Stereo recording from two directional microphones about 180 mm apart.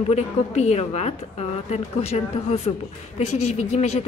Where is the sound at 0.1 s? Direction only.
35° left (ahead or behind).